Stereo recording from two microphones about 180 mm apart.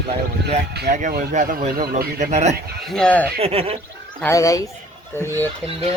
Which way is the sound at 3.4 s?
35° right (ahead or behind).